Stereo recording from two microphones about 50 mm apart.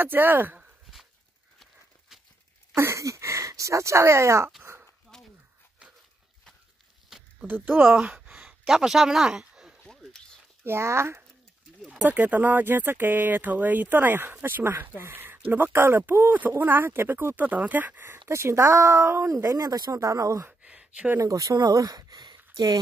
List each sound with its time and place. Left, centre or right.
0.0 s speech: right
2.7 s speech: right
4.7 s a sound: right
5.1 s a sound: centre
7.8 s speech: centre
9.8 s a sound: centre
10.6 s speech: right
12.0 s speech: right
17.4 s speech: right
18.3 s speech: right
20.0 s speech: right